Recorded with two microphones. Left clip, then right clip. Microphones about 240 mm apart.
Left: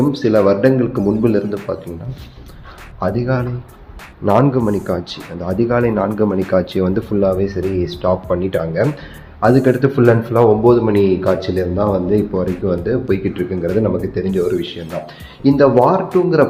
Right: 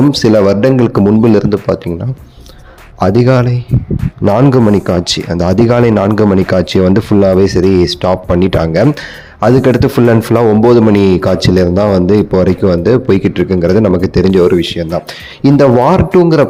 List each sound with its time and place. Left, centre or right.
0.1 s a man's voice: right
3.0 s a man's voice: right